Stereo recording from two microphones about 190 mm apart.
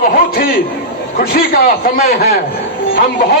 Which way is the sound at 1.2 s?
55° left (ahead or behind).